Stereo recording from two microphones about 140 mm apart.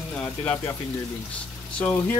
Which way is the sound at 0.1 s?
10° left (ahead or behind).